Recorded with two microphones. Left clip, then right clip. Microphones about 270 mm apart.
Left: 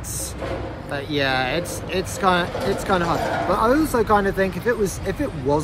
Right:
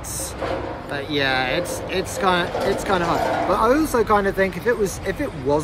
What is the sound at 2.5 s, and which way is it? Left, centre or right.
Speech, right.